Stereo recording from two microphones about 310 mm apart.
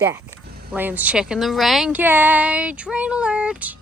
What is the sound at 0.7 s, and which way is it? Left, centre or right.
Speech, centre.